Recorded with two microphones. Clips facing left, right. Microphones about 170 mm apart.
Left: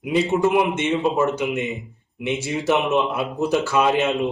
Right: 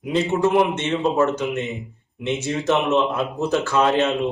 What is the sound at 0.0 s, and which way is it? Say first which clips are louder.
Speech: left 1 dB; 10° left (ahead or behind).